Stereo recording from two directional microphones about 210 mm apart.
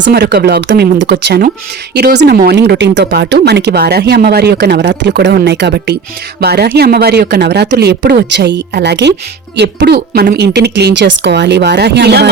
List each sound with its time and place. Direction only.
0.0 s speech: 50° right (ahead or behind)